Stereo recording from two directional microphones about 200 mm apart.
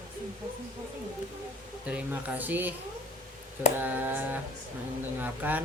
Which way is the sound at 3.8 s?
10° right (ahead or behind).